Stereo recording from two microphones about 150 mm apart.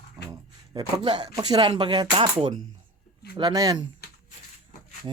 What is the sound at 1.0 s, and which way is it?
Speech, 30° right (ahead or behind).